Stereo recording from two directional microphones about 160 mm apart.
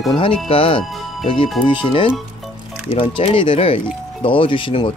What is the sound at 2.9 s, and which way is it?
Speech, 35° left (ahead or behind).